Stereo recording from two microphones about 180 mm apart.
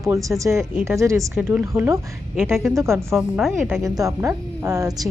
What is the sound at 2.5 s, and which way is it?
A woman's voice, centre (ahead or behind).